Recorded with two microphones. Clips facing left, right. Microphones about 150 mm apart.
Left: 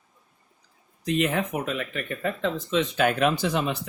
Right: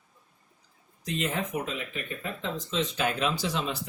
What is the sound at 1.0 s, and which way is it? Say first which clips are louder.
Speech: left 6 dB; 65° left (ahead or behind).